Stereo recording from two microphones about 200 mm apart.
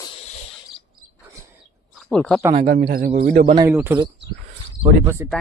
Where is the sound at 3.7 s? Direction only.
10° right (ahead or behind).